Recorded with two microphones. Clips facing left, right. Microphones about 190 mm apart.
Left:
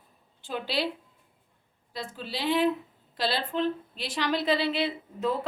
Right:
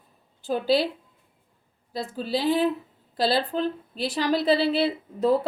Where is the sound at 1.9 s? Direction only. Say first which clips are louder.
Right 8 dB; 40° right (ahead or behind).